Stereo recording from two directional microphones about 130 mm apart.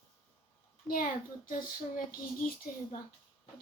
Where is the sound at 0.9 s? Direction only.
90° left.